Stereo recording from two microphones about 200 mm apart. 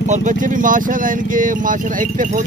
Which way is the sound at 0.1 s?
40° right (ahead or behind).